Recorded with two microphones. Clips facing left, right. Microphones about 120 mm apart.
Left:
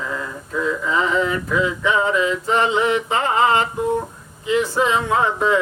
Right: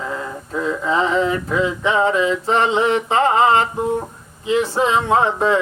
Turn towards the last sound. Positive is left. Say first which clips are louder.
# right 2 dB
turn(degrees=-30)  # may be behind; listen again after turning